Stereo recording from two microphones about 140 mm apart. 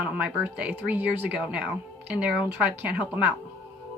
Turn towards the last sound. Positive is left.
turn(degrees=-10)  # may be behind; listen again after turning